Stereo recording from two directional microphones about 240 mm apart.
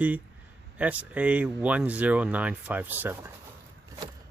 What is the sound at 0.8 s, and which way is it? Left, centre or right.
Speech, centre.